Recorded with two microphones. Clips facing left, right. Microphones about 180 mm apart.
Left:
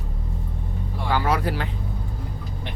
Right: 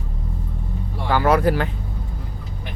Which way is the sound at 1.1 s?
50° right (ahead or behind).